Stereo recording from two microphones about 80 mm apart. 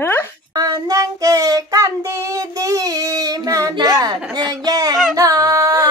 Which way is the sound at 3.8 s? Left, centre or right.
Right.